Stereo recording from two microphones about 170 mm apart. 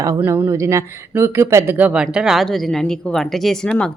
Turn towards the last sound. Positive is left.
turn(degrees=5)  # may be behind; listen again after turning